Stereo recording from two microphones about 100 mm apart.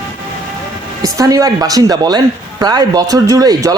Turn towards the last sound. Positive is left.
turn(degrees=-40)  # may be behind; listen again after turning